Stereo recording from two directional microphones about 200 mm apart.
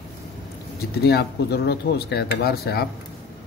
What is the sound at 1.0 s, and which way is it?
Speech, 55° left (ahead or behind).